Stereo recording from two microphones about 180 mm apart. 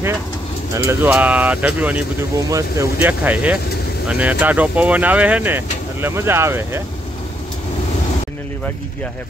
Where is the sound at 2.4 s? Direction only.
20° right (ahead or behind).